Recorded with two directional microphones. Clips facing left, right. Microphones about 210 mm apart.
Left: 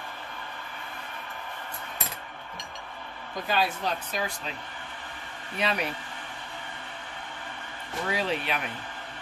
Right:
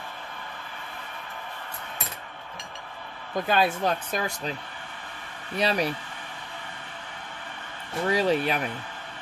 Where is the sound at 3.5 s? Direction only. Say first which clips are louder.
Right 4 dB; 50° right (ahead or behind).